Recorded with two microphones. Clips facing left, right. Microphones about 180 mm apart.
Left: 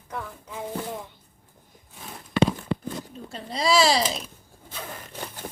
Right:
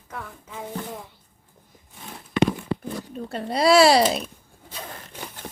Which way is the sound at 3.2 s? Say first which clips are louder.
Right 6 dB; 65° right (ahead or behind).